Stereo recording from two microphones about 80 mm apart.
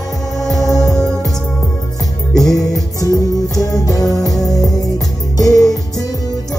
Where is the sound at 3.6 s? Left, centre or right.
Left.